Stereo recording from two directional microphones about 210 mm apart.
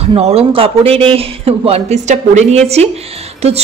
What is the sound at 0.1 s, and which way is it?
A woman's voice, 30° right (ahead or behind).